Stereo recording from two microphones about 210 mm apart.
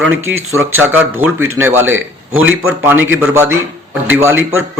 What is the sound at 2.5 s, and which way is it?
Speech, 75° right (ahead or behind).